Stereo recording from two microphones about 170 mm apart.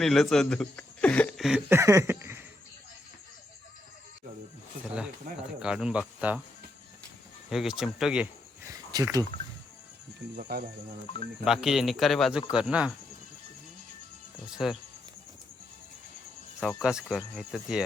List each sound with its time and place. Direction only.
0.0 s speech: centre (ahead or behind)
1.7 s a sound: 20° right (ahead or behind)
4.9 s a sound: 5° right (ahead or behind)
5.6 s speech: 5° right (ahead or behind)
7.5 s speech: 5° right (ahead or behind)
8.9 s speech: 20° right (ahead or behind)
10.3 s speech: 55° right (ahead or behind)
11.4 s speech: 5° right (ahead or behind)
14.5 s speech: 5° right (ahead or behind)
16.6 s speech: 5° right (ahead or behind)